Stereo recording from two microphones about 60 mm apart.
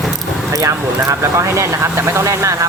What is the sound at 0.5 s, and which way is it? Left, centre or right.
Speech, right.